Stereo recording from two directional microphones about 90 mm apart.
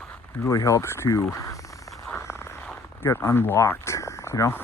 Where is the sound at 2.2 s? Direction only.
30° left (ahead or behind).